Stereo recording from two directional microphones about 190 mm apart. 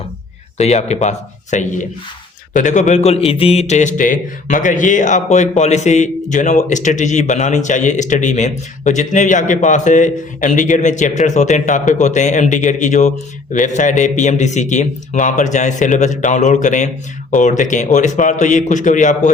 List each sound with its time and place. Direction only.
0.5 s a man's voice: 35° left (ahead or behind)